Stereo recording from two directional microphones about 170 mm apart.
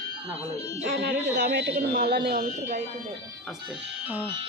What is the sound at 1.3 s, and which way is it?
Speech, 85° right.